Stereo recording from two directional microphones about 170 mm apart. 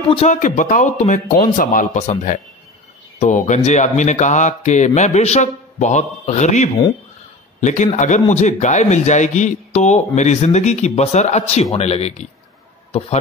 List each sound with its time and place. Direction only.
0.3 s a man's voice: 45° left (ahead or behind)